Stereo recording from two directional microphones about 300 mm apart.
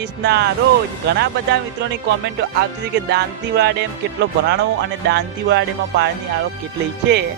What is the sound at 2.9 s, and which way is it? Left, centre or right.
Speech, right.